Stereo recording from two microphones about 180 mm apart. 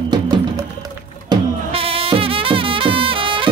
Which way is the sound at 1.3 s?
30° right (ahead or behind).